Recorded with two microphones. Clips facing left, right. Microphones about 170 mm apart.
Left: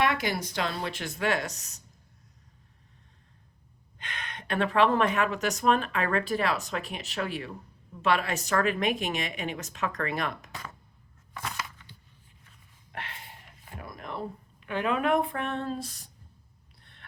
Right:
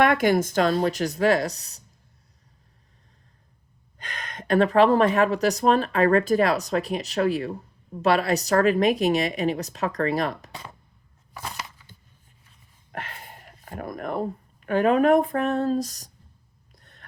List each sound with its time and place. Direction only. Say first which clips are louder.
0.0 s speech: right 8 dB; 50° right (ahead or behind); by 1.8 s 35° right (ahead or behind)
3.9 s speech: right 3 dB; 40° right (ahead or behind)
12.9 s a sound: right 4 dB; 45° right (ahead or behind)
14.7 s speech: right 8 dB; 45° right (ahead or behind)
16.8 s gasp: right 2 dB; 40° right (ahead or behind)